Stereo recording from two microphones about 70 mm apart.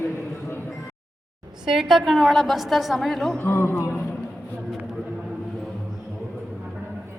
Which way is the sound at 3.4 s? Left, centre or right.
Left.